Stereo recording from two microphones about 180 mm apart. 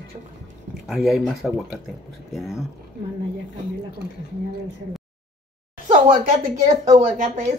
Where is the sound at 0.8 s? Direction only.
Centre (ahead or behind).